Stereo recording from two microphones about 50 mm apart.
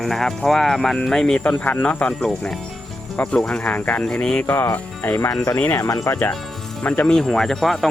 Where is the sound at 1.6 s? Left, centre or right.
Left.